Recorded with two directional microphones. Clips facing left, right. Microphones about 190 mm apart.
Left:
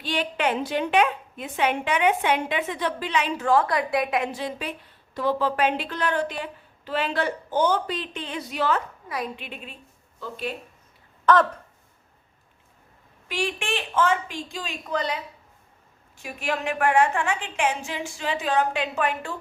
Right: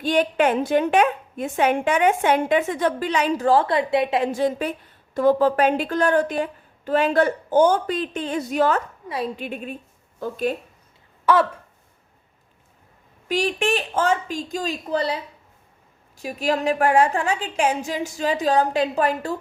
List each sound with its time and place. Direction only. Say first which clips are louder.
0.0 s a woman's voice: right 7 dB; 45° right (ahead or behind); by 4.3 s 25° right (ahead or behind)
4.3 s a woman's voice: right 9 dB; 45° right (ahead or behind)
9.0 s a woman's voice: right 5 dB; 30° right (ahead or behind); by 10.5 s 50° right (ahead or behind)
11.3 s a sound: right 1 dB; 10° right (ahead or behind)
13.2 s a woman's voice: right 7 dB; 40° right (ahead or behind)